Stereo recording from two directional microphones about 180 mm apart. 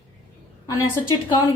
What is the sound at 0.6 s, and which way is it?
Speech, 20° left (ahead or behind).